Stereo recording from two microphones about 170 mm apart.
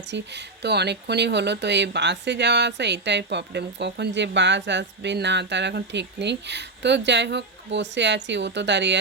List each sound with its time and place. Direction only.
0.1 s speech: 85° right